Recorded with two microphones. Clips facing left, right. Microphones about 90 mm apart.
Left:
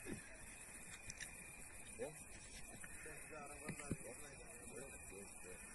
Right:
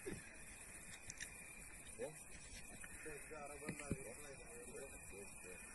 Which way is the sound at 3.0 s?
Centre (ahead or behind).